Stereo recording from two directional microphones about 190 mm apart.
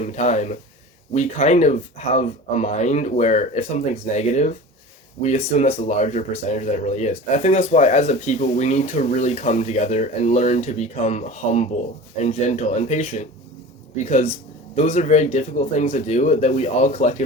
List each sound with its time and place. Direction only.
0.0 s speech: 35° left (ahead or behind)